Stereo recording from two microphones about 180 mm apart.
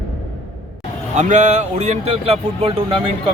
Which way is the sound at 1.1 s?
40° right (ahead or behind).